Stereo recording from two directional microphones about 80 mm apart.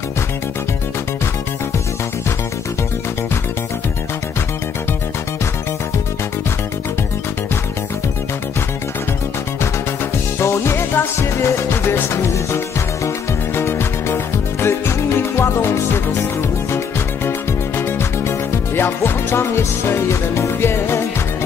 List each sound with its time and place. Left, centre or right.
10.4 s music: left
17.7 s music: left